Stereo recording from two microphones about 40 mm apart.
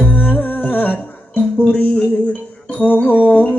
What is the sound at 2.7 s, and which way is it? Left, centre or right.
Music, left.